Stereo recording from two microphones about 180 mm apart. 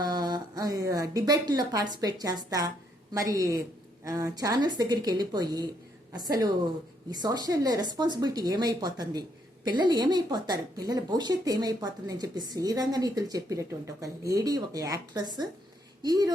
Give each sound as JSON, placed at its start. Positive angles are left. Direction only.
{"t": 0.0, "sound": "a woman's voice", "side_deg": -25}